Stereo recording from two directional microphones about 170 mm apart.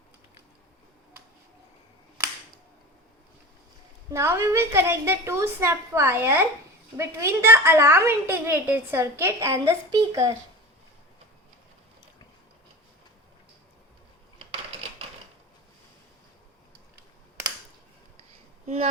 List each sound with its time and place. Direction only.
4.1 s a woman's voice: 15° right (ahead or behind)